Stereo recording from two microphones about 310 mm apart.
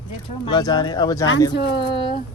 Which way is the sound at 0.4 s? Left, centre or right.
Centre.